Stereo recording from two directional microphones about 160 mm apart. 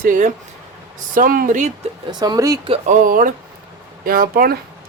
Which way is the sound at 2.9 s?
60° right (ahead or behind).